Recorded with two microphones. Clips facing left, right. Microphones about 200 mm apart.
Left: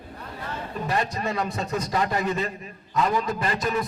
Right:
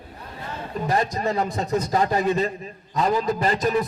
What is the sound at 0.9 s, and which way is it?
A man's voice, 35° right (ahead or behind).